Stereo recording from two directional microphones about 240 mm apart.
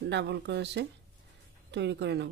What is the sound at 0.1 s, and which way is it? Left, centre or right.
Speech, right.